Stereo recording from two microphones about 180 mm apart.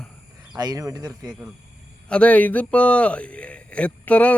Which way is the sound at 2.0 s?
5° left (ahead or behind).